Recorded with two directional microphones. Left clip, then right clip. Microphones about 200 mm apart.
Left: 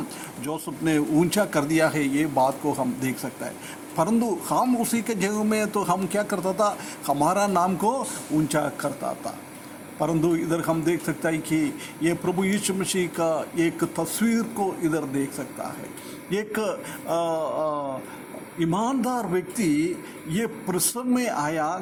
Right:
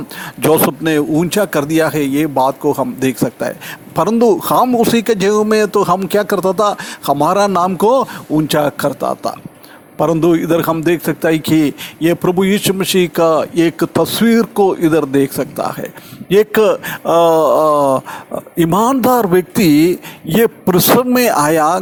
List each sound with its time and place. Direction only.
0.4 s a man's voice: 45° right (ahead or behind)